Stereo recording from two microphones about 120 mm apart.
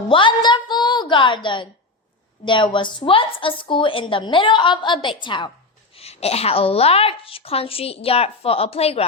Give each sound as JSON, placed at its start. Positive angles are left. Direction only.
{"t": 0.1, "sound": "a sound", "side_deg": 45}
{"t": 2.4, "sound": "a woman's voice", "side_deg": 40}
{"t": 5.9, "sound": "a woman's voice", "side_deg": 55}